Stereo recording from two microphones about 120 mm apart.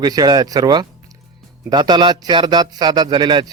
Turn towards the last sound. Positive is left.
turn(degrees=-40)  # may be behind; listen again after turning